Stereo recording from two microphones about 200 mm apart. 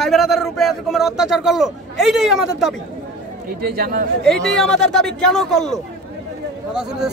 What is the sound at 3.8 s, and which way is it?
Speech, 45° right (ahead or behind).